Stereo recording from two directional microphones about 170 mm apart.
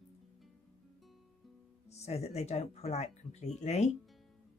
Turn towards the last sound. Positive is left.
turn(degrees=40)  # may be behind; listen again after turning